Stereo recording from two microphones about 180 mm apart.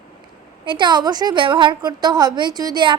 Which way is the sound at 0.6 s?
25° right (ahead or behind).